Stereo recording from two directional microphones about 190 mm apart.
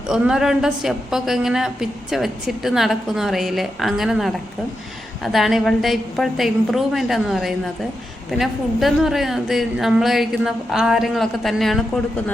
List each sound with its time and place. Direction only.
0.1 s a woman's voice: 5° right (ahead or behind)